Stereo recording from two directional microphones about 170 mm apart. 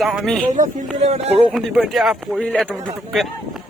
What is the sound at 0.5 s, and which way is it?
Speech, 45° right (ahead or behind).